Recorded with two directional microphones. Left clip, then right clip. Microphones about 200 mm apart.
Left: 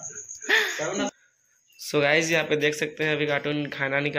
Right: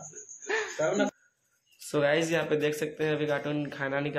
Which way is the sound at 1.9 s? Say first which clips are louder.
Left 4 dB; 15° left (ahead or behind).